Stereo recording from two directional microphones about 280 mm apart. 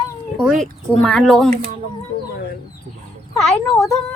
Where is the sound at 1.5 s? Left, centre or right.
Right.